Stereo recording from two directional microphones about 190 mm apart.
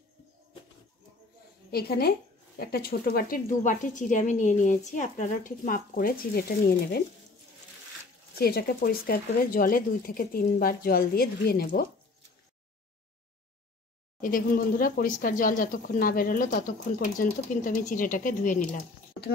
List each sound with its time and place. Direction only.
1.7 s a woman's voice: 55° left (ahead or behind)
8.4 s speech: 55° left (ahead or behind)
14.2 s speech: 45° left (ahead or behind)